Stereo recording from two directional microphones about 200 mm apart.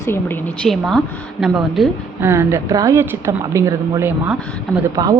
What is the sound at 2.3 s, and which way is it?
Speech, 15° right (ahead or behind).